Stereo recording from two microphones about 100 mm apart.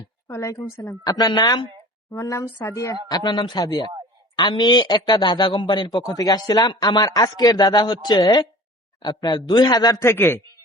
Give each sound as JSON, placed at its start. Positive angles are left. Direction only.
{"t": 0.3, "sound": "a woman's voice", "side_deg": 30}
{"t": 0.5, "sound": "speech", "side_deg": 40}
{"t": 2.0, "sound": "speech", "side_deg": 30}
{"t": 3.1, "sound": "speech", "side_deg": 45}
{"t": 6.1, "sound": "speech", "side_deg": 40}
{"t": 10.0, "sound": "a man's voice", "side_deg": 25}